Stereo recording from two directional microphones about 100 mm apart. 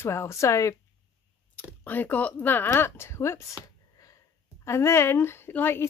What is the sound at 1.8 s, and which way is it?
Speech, 15° left (ahead or behind).